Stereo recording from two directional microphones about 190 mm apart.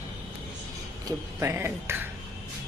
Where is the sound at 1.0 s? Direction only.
15° right (ahead or behind).